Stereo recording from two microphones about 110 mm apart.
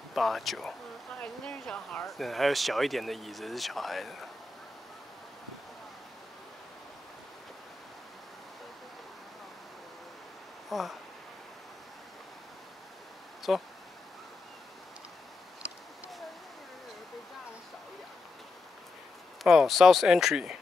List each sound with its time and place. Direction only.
0.1 s speech: centre (ahead or behind)
10.7 s speech: centre (ahead or behind)
13.5 s speech: centre (ahead or behind)
19.4 s speech: centre (ahead or behind)